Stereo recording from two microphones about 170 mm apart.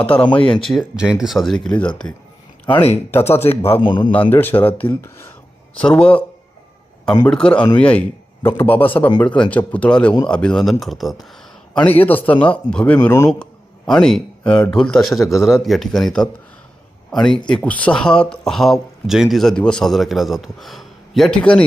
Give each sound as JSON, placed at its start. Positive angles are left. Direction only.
{"t": 0.6, "sound": "speech", "side_deg": 0}
{"t": 2.6, "sound": "speech", "side_deg": 30}
{"t": 3.2, "sound": "a man's voice", "side_deg": 15}
{"t": 3.8, "sound": "a man's voice", "side_deg": 25}
{"t": 4.3, "sound": "a man's voice", "side_deg": 10}
{"t": 7.3, "sound": "a man's voice", "side_deg": 5}